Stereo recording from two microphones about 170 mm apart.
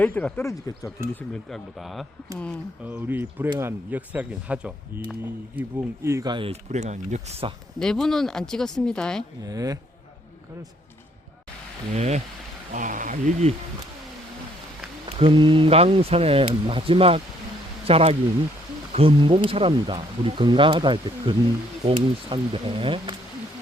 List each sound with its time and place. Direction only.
0.0 s speech: 10° left (ahead or behind)
0.4 s speech: 20° left (ahead or behind)
0.9 s speech: 5° left (ahead or behind)
2.8 s speech: 10° right (ahead or behind); by 7.5 s 40° right (ahead or behind)
7.8 s speech: 5° left (ahead or behind)
9.4 s speech: 20° right (ahead or behind)
11.9 s speech: 40° right (ahead or behind)
15.0 s speech: 30° right (ahead or behind)